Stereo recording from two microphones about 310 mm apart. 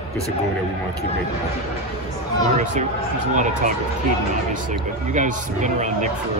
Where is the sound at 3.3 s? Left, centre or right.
Right.